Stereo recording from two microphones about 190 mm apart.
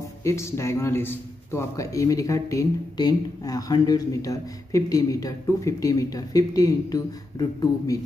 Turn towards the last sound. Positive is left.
turn(degrees=20)  # may be behind; listen again after turning